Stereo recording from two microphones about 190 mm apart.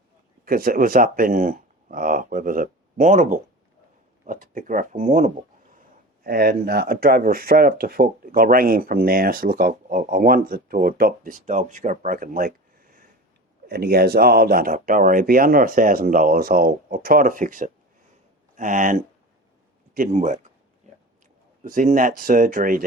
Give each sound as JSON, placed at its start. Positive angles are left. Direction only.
{"t": 0.4, "sound": "speech", "side_deg": -50}
{"t": 21.6, "sound": "speech", "side_deg": -45}